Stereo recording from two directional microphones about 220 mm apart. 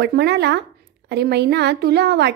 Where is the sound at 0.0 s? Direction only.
50° right (ahead or behind).